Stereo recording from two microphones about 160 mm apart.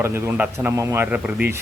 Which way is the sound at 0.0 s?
15° right (ahead or behind).